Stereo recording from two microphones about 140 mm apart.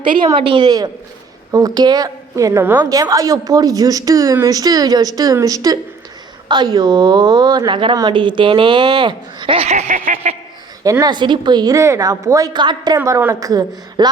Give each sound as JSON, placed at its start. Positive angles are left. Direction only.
{"t": 0.4, "sound": "a woman's voice", "side_deg": -35}
{"t": 10.8, "sound": "a woman's voice", "side_deg": -25}
{"t": 13.0, "sound": "a woman's voice", "side_deg": -15}